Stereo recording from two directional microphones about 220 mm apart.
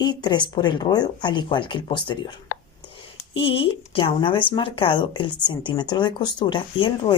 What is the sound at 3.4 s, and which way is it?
Speech, 25° left (ahead or behind).